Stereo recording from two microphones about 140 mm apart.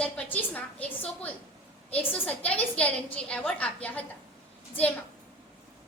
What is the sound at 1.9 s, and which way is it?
A child's voice, 10° left (ahead or behind).